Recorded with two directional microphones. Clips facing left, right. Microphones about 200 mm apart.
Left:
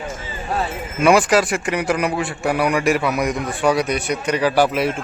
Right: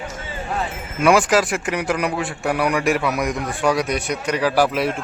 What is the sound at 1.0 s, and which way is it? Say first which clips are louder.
A man's voice: left 1 dB; centre (ahead or behind).